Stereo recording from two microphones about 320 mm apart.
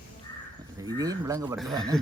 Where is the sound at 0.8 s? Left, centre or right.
Centre.